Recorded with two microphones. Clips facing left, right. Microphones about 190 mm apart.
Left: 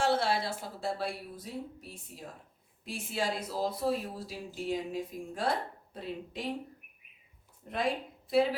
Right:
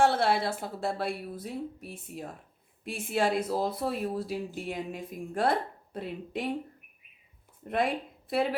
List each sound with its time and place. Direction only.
0.0 s speech: 60° right (ahead or behind)
7.6 s speech: 65° right (ahead or behind)